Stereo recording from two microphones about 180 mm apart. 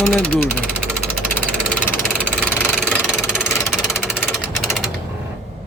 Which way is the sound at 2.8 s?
5° right (ahead or behind).